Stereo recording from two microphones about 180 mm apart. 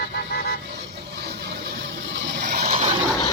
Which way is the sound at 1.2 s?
65° right (ahead or behind).